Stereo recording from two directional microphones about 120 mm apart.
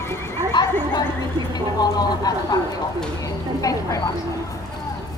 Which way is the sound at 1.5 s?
35° left (ahead or behind).